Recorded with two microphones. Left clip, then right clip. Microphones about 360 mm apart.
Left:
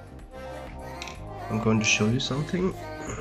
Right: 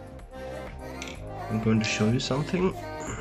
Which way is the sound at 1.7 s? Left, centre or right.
Centre.